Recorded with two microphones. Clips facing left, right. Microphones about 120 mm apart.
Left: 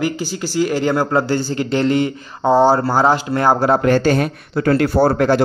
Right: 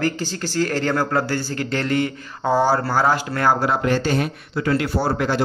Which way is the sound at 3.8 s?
55° left (ahead or behind).